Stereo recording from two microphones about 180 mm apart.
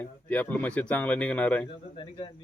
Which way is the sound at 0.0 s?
10° left (ahead or behind).